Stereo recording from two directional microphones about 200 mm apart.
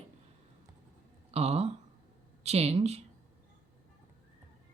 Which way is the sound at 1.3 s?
30° right (ahead or behind).